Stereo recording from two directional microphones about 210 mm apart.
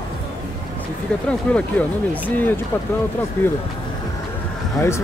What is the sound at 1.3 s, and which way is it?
Speech, 5° left (ahead or behind).